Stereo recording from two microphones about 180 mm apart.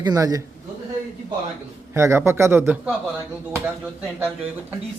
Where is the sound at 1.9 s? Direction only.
15° right (ahead or behind).